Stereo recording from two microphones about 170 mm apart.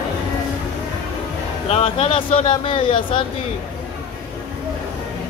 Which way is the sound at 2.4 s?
35° left (ahead or behind).